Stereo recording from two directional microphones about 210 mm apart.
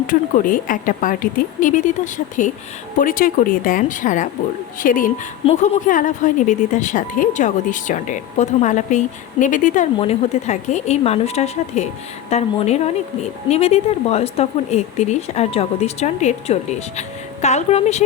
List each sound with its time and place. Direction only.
0.1 s a woman's voice: 40° left (ahead or behind)